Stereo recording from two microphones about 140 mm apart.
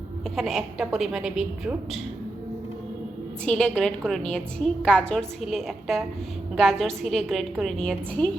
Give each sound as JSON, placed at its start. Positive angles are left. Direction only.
{"t": 0.3, "sound": "a woman's voice", "side_deg": 0}
{"t": 3.4, "sound": "a woman's voice", "side_deg": 5}